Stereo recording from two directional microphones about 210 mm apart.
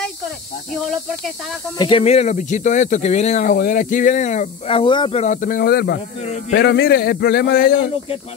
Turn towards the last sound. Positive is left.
turn(degrees=45)  # may be behind; listen again after turning